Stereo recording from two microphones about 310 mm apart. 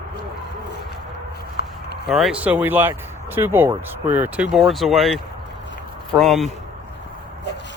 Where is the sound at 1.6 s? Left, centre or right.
Left.